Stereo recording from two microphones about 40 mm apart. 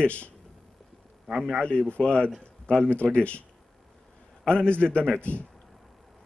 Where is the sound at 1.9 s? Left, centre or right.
Left.